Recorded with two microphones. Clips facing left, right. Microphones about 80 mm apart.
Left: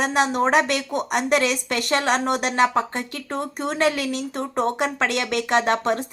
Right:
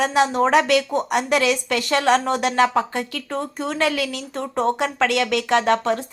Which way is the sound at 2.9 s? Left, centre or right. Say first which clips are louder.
Right 2 dB; left.